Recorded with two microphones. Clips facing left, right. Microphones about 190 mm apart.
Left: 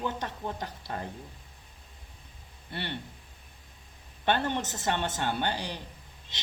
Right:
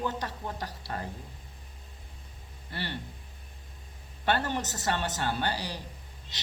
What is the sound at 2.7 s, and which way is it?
Speech, 20° left (ahead or behind).